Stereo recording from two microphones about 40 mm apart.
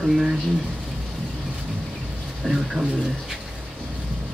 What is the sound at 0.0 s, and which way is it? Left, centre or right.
Speech, centre.